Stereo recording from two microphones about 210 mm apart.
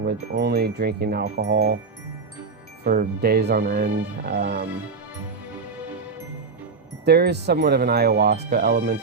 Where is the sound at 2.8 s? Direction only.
45° right (ahead or behind).